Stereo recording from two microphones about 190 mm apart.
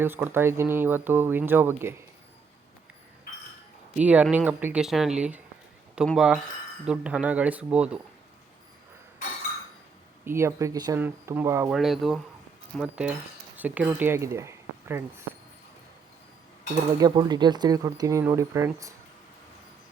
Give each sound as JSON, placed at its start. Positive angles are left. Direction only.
{"t": 0.0, "sound": "speech", "side_deg": -10}
{"t": 3.9, "sound": "speech", "side_deg": -5}
{"t": 10.2, "sound": "speech", "side_deg": -15}
{"t": 11.7, "sound": "speech", "side_deg": 0}
{"t": 16.7, "sound": "speech", "side_deg": -20}